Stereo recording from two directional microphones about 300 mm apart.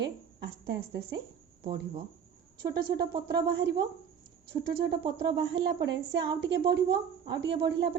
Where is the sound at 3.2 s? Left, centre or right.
Right.